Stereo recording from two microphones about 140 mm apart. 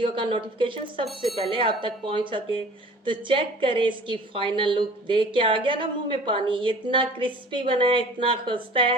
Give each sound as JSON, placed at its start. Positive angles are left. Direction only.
{"t": 0.0, "sound": "a woman's voice", "side_deg": -35}
{"t": 1.0, "sound": "speech", "side_deg": 0}
{"t": 1.4, "sound": "a woman's voice", "side_deg": -40}